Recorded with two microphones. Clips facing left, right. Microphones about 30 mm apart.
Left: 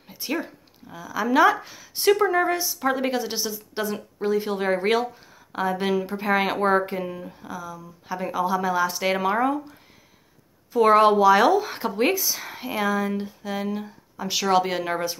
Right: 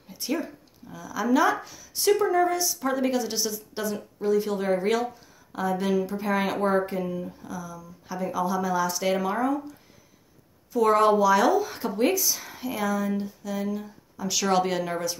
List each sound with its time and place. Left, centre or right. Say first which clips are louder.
0.1 s speech: left 1 dB; left
3.9 s speech: right 1 dB; left
14.4 s speech: left 2 dB; centre
14.8 s speech: left 2 dB; left